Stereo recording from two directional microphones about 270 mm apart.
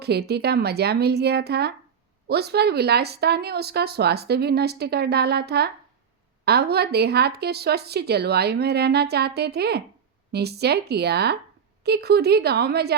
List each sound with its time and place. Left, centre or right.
0.0 s speech: right